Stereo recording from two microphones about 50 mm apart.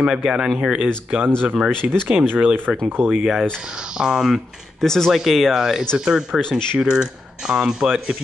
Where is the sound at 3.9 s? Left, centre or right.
Centre.